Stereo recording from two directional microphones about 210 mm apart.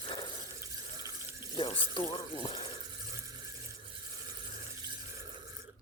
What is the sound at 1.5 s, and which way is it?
Water, 25° left (ahead or behind).